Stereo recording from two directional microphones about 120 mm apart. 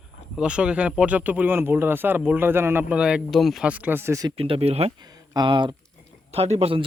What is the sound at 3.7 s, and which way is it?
Speech, 15° right (ahead or behind).